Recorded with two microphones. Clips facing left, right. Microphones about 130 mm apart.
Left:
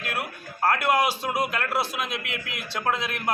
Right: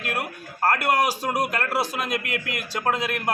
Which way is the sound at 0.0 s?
45° right (ahead or behind).